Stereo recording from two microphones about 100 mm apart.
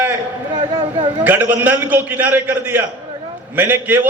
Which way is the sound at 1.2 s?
15° right (ahead or behind).